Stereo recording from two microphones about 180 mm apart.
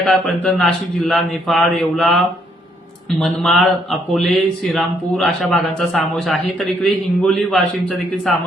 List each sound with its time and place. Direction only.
0.0 s a man's voice: centre (ahead or behind)